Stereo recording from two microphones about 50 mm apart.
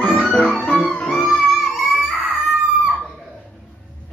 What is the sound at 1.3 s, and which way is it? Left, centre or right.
Music, centre.